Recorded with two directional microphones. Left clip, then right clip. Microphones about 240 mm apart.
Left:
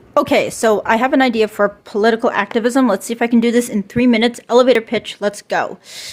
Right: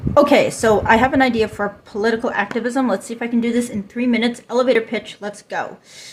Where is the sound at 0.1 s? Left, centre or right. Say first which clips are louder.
Right 2 dB; left.